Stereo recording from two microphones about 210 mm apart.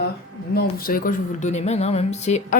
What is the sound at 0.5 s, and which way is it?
Speech, 45° left (ahead or behind).